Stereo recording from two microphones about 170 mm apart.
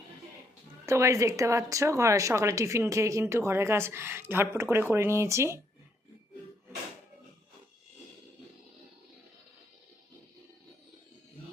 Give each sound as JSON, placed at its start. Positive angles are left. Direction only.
{"t": 0.9, "sound": "speech", "side_deg": -15}